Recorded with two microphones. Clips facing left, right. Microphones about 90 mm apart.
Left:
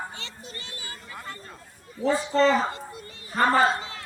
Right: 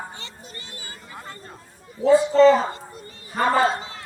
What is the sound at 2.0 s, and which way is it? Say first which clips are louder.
Speech: right 8 dB; 25° right (ahead or behind).